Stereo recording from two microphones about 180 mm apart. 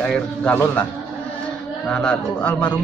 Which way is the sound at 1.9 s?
5° left (ahead or behind).